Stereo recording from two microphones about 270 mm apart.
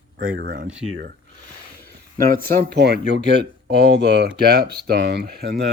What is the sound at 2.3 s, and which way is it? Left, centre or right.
Speech, right.